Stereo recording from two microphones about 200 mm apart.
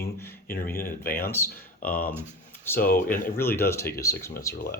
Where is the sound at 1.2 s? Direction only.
10° left (ahead or behind).